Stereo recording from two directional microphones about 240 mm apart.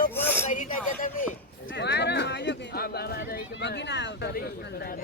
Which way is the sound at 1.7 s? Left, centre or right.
Left.